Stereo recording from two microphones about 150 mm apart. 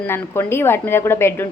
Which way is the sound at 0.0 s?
15° left (ahead or behind).